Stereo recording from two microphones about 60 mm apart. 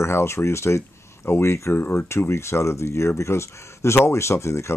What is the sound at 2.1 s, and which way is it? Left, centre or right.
Speech, left.